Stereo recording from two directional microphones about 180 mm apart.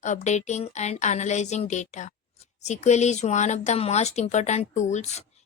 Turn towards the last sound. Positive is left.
turn(degrees=40)  # may be behind; listen again after turning